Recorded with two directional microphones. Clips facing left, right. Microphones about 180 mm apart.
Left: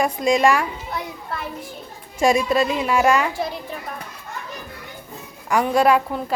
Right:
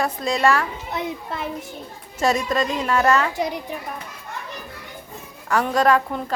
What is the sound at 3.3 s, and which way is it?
Speech, 15° right (ahead or behind).